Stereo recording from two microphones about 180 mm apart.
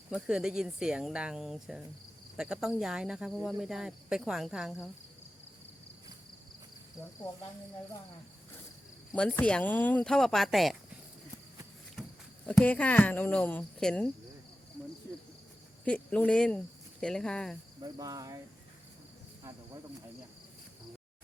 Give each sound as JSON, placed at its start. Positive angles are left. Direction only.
{"t": 0.1, "sound": "speech", "side_deg": -5}
{"t": 9.4, "sound": "speech", "side_deg": 5}
{"t": 12.5, "sound": "speech", "side_deg": 10}
{"t": 15.8, "sound": "speech", "side_deg": 5}
{"t": 17.8, "sound": "cricket", "side_deg": -20}